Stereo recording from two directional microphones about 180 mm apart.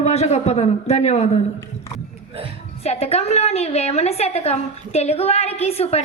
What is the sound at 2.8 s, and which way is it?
A woman's voice, 35° left (ahead or behind).